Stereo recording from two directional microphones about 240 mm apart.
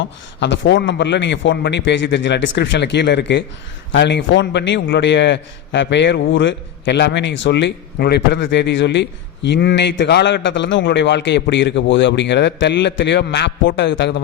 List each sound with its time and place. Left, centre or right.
0.0 s a man's voice: left